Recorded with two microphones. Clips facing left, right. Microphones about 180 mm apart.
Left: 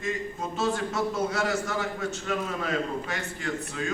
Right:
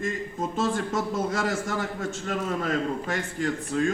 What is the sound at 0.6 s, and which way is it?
A man's voice, 45° right (ahead or behind).